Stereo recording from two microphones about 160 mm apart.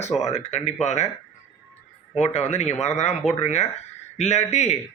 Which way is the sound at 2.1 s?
40° left (ahead or behind).